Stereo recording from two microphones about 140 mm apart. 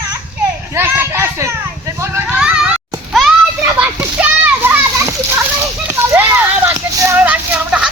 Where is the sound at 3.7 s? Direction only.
15° right (ahead or behind).